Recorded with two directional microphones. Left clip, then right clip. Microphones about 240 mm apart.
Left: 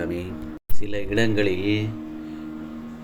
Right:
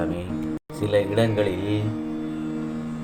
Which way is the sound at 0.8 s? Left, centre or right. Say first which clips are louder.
Right 4 dB; left.